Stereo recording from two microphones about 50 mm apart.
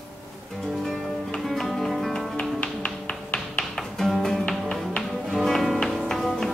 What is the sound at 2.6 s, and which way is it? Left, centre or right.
Music, left.